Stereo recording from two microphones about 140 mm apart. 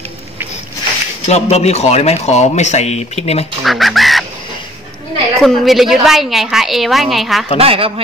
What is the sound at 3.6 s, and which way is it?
Chicken, centre (ahead or behind).